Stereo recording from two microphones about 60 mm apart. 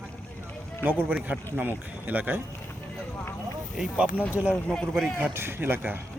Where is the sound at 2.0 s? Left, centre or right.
Right.